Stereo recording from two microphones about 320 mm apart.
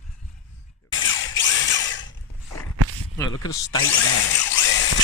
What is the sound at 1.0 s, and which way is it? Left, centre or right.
Drill, left.